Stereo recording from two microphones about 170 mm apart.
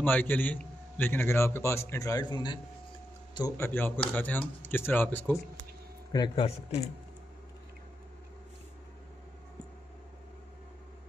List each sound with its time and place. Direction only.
0.0 s a man's voice: 10° left (ahead or behind)
6.1 s speech: 30° left (ahead or behind)